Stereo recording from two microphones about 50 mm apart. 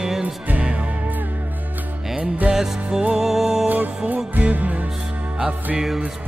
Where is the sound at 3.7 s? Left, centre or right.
Right.